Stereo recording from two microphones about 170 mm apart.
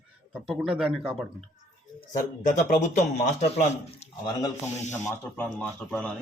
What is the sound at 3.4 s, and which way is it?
Speech, 40° left (ahead or behind).